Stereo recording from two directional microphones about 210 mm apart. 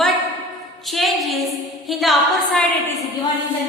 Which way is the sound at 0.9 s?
Centre (ahead or behind).